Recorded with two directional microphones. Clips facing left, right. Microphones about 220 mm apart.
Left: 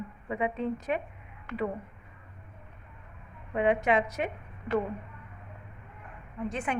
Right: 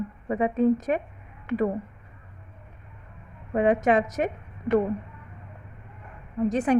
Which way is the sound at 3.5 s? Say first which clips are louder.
Right 5 dB; 45° right (ahead or behind).